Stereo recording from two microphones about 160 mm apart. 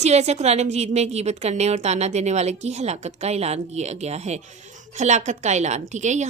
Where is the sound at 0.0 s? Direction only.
45° right (ahead or behind).